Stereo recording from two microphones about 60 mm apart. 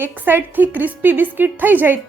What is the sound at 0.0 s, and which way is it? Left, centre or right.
A woman's voice, right.